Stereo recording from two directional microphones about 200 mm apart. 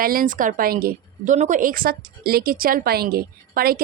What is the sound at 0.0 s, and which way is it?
A woman's voice, 45° right (ahead or behind).